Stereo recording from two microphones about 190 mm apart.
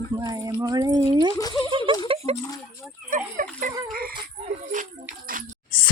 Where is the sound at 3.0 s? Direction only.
45° right (ahead or behind).